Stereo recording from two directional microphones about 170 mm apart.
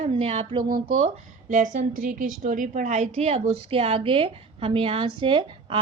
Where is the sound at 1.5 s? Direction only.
50° right (ahead or behind).